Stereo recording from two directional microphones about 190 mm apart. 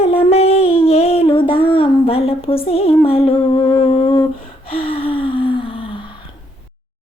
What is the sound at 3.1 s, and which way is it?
Humming, 30° left (ahead or behind).